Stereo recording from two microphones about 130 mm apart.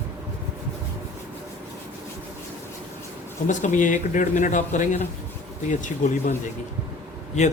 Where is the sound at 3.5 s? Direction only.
75° left (ahead or behind).